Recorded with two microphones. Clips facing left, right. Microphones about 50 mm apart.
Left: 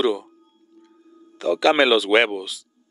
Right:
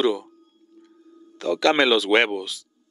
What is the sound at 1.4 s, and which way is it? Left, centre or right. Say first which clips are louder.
Speech: left 2 dB; centre.